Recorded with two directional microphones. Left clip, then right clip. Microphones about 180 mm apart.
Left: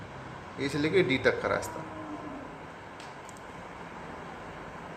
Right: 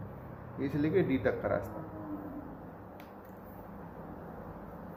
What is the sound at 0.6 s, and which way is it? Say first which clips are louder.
A man's voice: left 4 dB; 15° left (ahead or behind).